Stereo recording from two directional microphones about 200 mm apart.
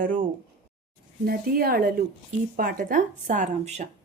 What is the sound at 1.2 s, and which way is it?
A woman's voice, 50° right (ahead or behind).